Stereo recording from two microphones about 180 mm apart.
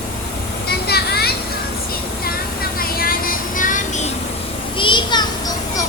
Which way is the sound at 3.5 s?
45° left (ahead or behind).